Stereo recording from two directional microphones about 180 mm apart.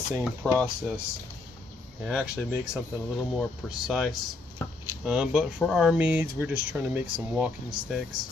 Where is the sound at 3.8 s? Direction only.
Centre (ahead or behind).